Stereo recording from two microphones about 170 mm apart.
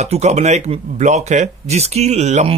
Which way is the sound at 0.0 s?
40° right (ahead or behind).